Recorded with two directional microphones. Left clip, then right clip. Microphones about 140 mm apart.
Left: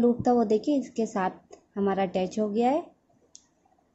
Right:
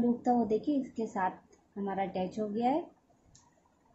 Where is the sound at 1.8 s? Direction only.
60° left (ahead or behind).